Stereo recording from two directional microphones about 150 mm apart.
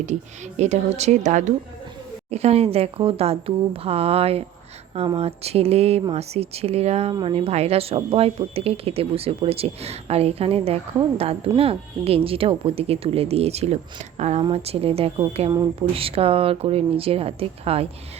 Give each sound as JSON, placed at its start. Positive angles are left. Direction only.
{"t": 0.0, "sound": "speech", "side_deg": -50}
{"t": 7.1, "sound": "speech", "side_deg": -30}
{"t": 7.3, "sound": "speech", "side_deg": -45}